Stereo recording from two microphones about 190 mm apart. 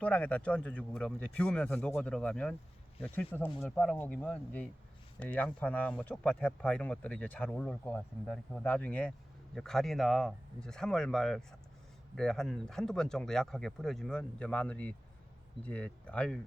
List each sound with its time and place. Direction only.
0.0 s speech: 5° left (ahead or behind)